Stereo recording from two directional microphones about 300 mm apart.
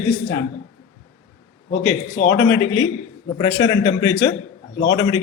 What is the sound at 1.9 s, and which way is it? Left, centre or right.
Speech, left.